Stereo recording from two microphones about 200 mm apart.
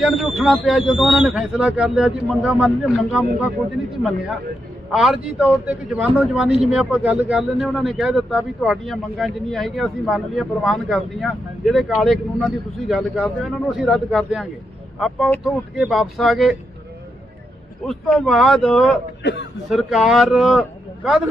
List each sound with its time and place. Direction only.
0.0 s a man's voice: centre (ahead or behind)
4.9 s a man's voice: centre (ahead or behind)
17.8 s a man's voice: centre (ahead or behind)
19.2 s a man's voice: 60° left (ahead or behind)
19.7 s a man's voice: centre (ahead or behind)